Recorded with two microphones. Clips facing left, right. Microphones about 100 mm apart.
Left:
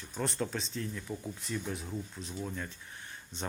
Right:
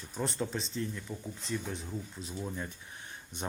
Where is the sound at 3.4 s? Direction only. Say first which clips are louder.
Right 1 dB; 15° right (ahead or behind).